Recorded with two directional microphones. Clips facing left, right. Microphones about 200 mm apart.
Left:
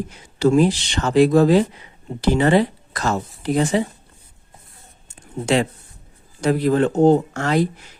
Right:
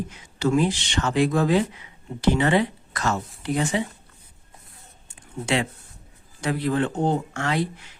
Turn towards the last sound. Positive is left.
turn(degrees=40)  # may be behind; listen again after turning